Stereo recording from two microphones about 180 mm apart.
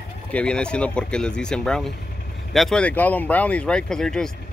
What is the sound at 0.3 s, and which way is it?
Speech, 5° left (ahead or behind).